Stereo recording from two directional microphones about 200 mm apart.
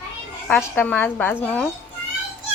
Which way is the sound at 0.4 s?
5° left (ahead or behind).